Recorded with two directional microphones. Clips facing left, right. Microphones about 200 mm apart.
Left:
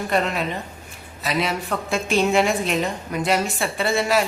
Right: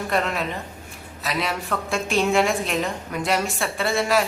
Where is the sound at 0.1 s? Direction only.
Centre (ahead or behind).